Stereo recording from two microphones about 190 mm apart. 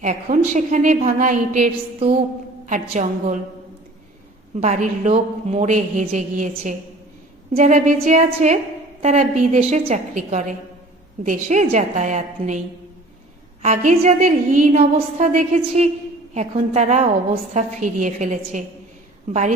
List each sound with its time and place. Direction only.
0.0 s a woman's voice: 40° right (ahead or behind)
4.6 s a woman's voice: 35° right (ahead or behind)
7.5 s a woman's voice: 40° right (ahead or behind)